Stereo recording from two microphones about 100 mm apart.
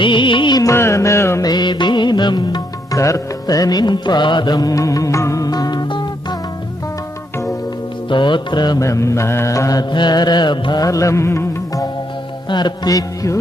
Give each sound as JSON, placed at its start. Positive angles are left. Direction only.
{"t": 0.0, "sound": "music", "side_deg": 55}
{"t": 0.6, "sound": "music", "side_deg": 25}
{"t": 1.5, "sound": "music", "side_deg": 45}
{"t": 3.0, "sound": "music", "side_deg": 35}
{"t": 8.1, "sound": "music", "side_deg": 50}
{"t": 8.8, "sound": "music", "side_deg": 30}
{"t": 9.9, "sound": "music", "side_deg": 50}
{"t": 10.8, "sound": "music", "side_deg": 30}
{"t": 12.5, "sound": "music", "side_deg": 45}